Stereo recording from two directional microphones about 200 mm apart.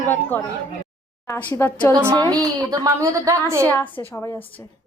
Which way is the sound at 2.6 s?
20° right (ahead or behind).